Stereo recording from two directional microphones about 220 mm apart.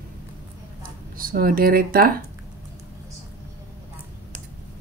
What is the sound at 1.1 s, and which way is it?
Speech, 40° right (ahead or behind).